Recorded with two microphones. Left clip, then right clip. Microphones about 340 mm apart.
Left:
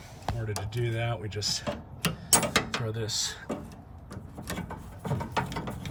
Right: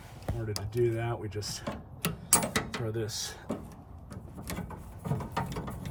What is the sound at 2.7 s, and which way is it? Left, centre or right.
Speech, centre.